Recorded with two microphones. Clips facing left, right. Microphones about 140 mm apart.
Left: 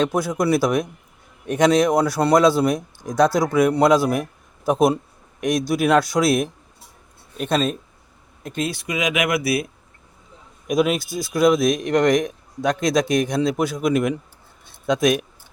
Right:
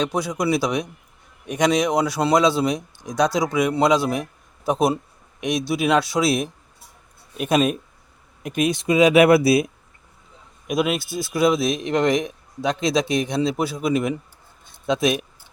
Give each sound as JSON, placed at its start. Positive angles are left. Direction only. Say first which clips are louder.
{"t": 0.0, "sound": "speech", "louder": "left 2 dB", "side_deg": 0}
{"t": 10.7, "sound": "speech", "louder": "left 2 dB", "side_deg": 0}